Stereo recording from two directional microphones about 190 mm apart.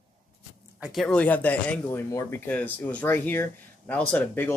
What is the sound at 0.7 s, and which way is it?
Speech, 5° right (ahead or behind).